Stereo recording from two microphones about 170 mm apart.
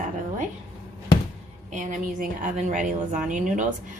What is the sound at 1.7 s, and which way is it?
A woman's voice, 50° right (ahead or behind).